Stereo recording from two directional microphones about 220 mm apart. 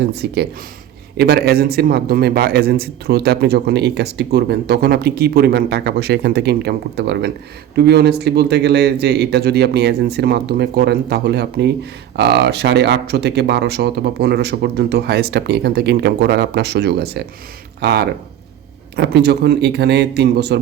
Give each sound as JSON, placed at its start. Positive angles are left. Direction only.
{"t": 0.0, "sound": "a man's voice", "side_deg": -45}